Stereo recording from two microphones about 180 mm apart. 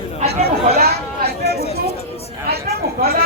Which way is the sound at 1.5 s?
35° left (ahead or behind).